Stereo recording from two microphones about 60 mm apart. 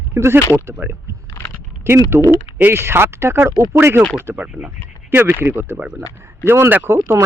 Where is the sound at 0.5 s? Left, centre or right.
Right.